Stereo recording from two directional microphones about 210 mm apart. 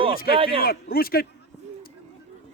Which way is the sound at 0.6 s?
45° left (ahead or behind).